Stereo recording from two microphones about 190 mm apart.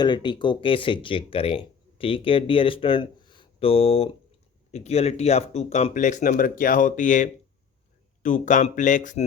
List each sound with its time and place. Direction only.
0.0 s speech: 25° left (ahead or behind); by 9.2 s 40° left (ahead or behind)